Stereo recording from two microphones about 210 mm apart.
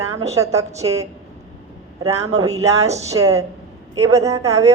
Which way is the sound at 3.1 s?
15° right (ahead or behind).